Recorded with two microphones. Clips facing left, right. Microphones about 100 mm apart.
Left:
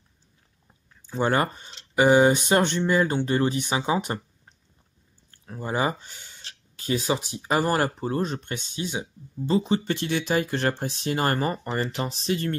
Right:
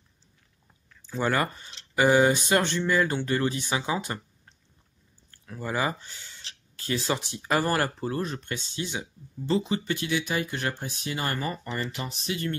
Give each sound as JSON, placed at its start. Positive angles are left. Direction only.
{"t": 0.8, "sound": "speech", "side_deg": 25}
{"t": 9.8, "sound": "speech", "side_deg": 35}